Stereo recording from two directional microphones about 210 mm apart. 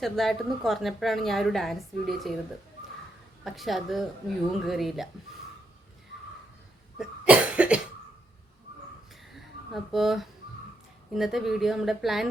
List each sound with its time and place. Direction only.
0.0 s a woman's voice: centre (ahead or behind)
3.4 s a woman's voice: centre (ahead or behind)
7.0 s cough: 5° right (ahead or behind)
9.3 s a sound: centre (ahead or behind)
11.1 s a woman's voice: centre (ahead or behind)